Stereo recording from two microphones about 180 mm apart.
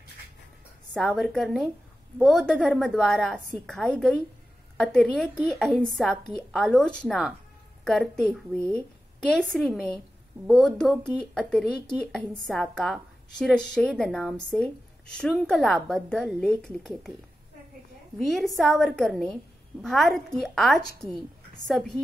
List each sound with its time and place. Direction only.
0.9 s speech: centre (ahead or behind)
18.2 s speech: centre (ahead or behind)